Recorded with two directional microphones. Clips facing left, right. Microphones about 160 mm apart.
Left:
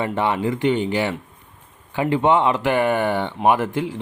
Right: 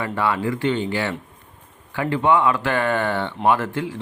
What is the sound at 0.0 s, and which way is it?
Speech, 20° left (ahead or behind).